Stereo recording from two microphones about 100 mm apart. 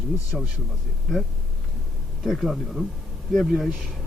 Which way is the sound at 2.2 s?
Centre (ahead or behind).